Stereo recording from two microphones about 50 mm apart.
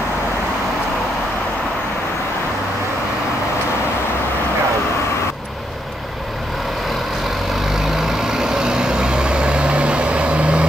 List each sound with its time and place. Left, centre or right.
7.7 s vehicle: centre